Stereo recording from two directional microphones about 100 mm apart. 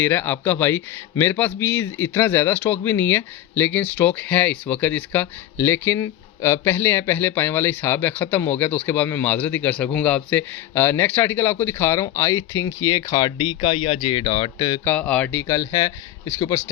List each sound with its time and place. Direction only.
0.0 s a man's voice: 20° left (ahead or behind); by 14.8 s 50° left (ahead or behind)
14.8 s a man's voice: 15° left (ahead or behind); by 16.6 s 35° left (ahead or behind)